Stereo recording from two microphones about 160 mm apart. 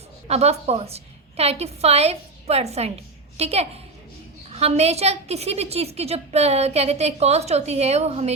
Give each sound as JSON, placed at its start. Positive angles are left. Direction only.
{"t": 0.3, "sound": "a woman's voice", "side_deg": -40}